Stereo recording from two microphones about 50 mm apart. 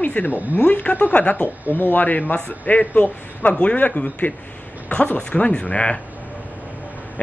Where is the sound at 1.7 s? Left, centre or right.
Left.